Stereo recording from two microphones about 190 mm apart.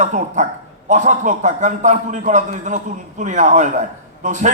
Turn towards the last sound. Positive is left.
turn(degrees=-40)  # may be behind; listen again after turning